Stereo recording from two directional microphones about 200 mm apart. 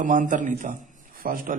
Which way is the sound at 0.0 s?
40° right (ahead or behind).